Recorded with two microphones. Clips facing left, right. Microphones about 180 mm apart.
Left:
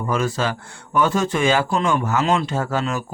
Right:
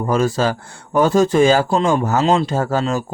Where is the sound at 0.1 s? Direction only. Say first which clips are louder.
Right 5 dB; 40° right (ahead or behind).